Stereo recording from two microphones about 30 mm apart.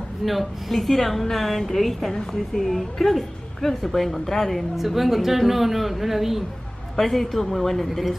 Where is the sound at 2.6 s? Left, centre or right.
Centre.